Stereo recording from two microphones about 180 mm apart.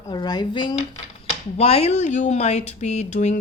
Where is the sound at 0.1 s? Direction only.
25° left (ahead or behind).